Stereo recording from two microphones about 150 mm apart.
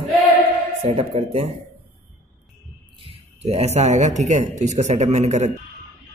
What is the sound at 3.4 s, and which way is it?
A man's voice, 45° right (ahead or behind).